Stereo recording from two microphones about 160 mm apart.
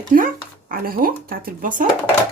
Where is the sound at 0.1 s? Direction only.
65° right (ahead or behind).